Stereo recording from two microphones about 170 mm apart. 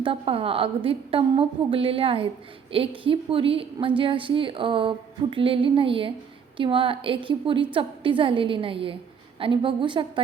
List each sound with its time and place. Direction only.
0.0 s a woman's voice: 35° right (ahead or behind)